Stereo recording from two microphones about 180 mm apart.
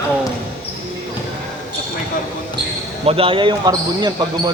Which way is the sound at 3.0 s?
30° right (ahead or behind).